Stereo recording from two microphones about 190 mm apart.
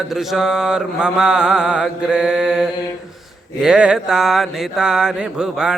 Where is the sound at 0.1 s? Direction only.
Centre (ahead or behind).